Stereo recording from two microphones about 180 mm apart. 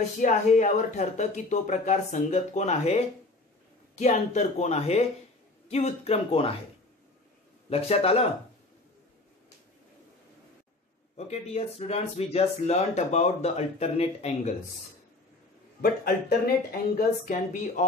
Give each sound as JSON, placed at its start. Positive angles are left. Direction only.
{"t": 0.2, "sound": "speech", "side_deg": 45}
{"t": 7.7, "sound": "speech", "side_deg": 35}
{"t": 11.1, "sound": "speech", "side_deg": 35}
{"t": 15.8, "sound": "speech", "side_deg": 55}